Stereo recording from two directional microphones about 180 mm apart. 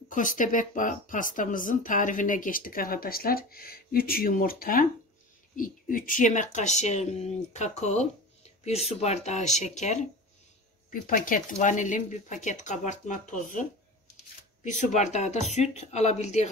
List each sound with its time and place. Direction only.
0.1 s speech: 45° left (ahead or behind)
10.9 s speech: 50° left (ahead or behind)